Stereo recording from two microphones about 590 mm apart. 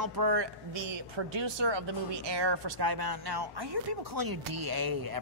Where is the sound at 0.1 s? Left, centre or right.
Right.